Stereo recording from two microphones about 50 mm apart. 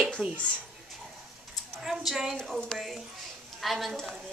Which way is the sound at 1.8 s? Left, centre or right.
Centre.